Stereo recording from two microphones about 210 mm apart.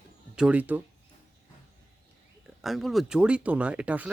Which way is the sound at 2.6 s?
Centre (ahead or behind).